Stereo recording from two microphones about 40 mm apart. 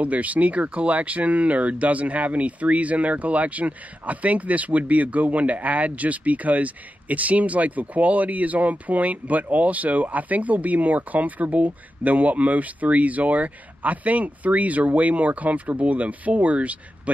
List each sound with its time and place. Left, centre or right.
0.0 s speech: right